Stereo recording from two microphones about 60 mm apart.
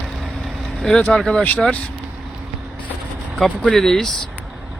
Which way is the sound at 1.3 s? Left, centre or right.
Centre.